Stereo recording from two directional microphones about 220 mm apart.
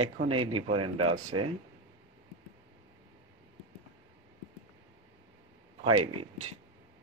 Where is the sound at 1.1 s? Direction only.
75° right (ahead or behind).